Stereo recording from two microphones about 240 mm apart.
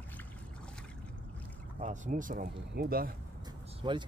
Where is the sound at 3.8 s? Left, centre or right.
Centre.